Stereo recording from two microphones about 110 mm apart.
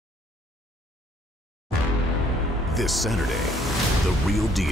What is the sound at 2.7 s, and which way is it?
Speech, centre (ahead or behind).